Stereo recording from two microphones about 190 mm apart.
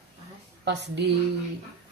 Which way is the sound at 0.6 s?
65° right (ahead or behind).